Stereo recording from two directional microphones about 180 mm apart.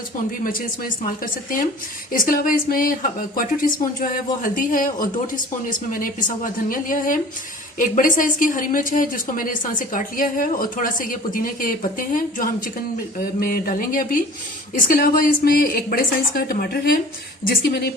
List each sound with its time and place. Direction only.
1.0 s a woman's voice: 50° left (ahead or behind)